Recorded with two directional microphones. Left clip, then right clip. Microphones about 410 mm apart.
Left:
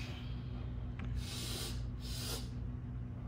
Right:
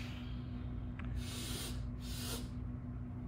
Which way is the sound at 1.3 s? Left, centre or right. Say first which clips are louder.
Left 2 dB; centre.